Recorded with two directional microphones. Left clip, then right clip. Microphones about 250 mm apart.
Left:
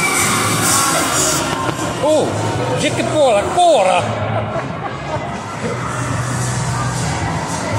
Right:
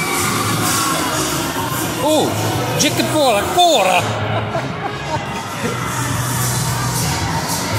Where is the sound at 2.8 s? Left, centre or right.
Right.